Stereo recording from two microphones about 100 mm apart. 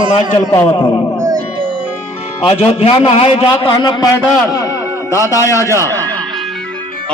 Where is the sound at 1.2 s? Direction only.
40° right (ahead or behind).